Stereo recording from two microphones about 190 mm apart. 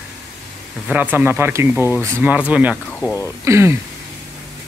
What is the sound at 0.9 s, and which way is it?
Speech, 10° right (ahead or behind).